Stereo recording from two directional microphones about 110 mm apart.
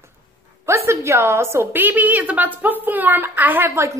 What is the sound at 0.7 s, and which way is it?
A woman's voice, 25° right (ahead or behind).